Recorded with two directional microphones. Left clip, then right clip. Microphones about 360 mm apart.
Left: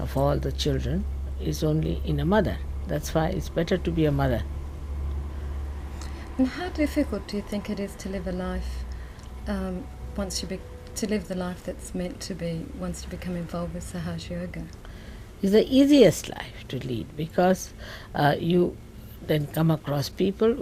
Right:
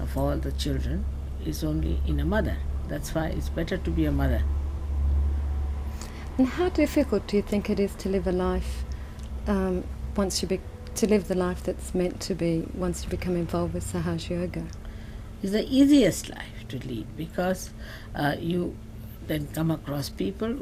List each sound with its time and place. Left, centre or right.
0.0 s speech: left
6.4 s speech: centre
15.4 s speech: left